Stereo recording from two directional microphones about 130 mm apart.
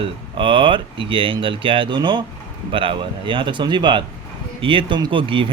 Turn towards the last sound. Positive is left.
turn(degrees=-40)  # may be behind; listen again after turning